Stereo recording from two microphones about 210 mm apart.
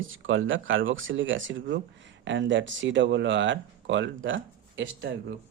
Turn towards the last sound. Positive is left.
turn(degrees=-65)  # may be behind; listen again after turning